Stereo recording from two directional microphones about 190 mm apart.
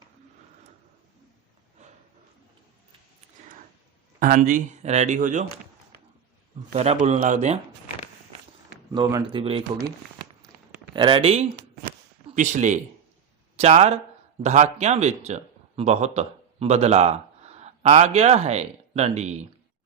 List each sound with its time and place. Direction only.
4.2 s speech: 45° right (ahead or behind)
6.7 s speech: 35° right (ahead or behind)
8.9 s speech: 20° right (ahead or behind)
9.2 s speech: 30° right (ahead or behind)
10.9 s a man's voice: 25° right (ahead or behind)